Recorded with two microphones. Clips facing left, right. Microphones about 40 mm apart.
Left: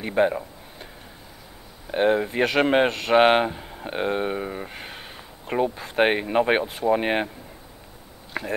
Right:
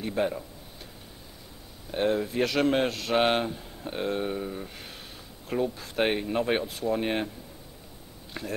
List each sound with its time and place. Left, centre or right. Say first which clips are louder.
0.0 s a sound: left 7 dB; left
1.9 s speech: left 6 dB; left
8.3 s speech: left 6 dB; left